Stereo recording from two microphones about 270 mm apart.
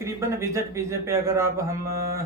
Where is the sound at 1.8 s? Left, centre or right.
Right.